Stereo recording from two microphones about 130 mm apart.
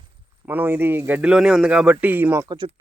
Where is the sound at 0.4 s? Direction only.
15° right (ahead or behind).